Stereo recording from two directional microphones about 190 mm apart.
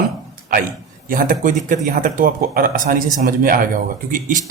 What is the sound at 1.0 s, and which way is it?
A man's voice, 45° right (ahead or behind).